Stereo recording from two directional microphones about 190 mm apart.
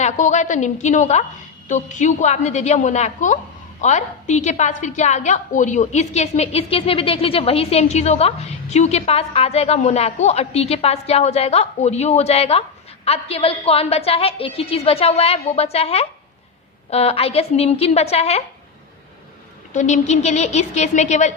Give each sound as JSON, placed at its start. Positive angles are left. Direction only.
{"t": 0.0, "sound": "a woman's voice", "side_deg": 40}
{"t": 19.7, "sound": "a woman's voice", "side_deg": 40}